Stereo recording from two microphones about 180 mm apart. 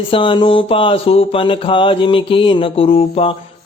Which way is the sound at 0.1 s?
25° left (ahead or behind).